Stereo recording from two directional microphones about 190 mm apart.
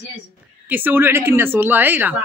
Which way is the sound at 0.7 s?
10° right (ahead or behind).